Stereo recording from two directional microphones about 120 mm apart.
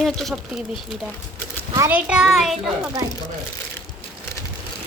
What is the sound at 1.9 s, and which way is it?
Speech, 5° right (ahead or behind).